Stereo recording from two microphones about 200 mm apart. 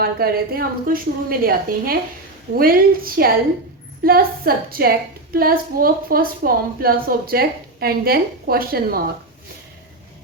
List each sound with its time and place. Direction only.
0.0 s a woman's voice: 50° right (ahead or behind)